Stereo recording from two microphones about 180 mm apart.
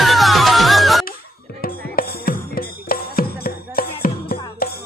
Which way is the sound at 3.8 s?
55° left (ahead or behind).